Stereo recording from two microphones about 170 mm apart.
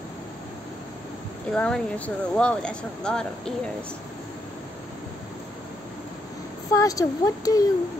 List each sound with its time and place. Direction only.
1.5 s speech: 5° left (ahead or behind)
6.7 s speech: 20° left (ahead or behind)